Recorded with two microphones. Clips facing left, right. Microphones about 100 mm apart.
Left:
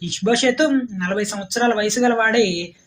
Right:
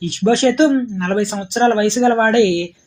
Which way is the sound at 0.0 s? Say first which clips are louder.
Right 4 dB; 35° right (ahead or behind).